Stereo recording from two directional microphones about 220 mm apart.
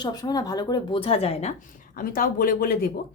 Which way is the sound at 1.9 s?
40° left (ahead or behind).